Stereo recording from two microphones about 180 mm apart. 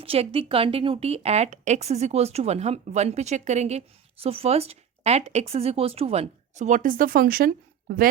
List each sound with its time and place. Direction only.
0.0 s a woman's voice: 30° right (ahead or behind); by 8.0 s 55° right (ahead or behind)